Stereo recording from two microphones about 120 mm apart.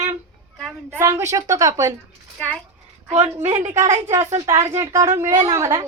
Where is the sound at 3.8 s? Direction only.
25° right (ahead or behind).